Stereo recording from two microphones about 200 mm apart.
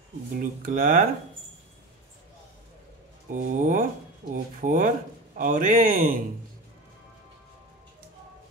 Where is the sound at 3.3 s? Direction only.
40° right (ahead or behind).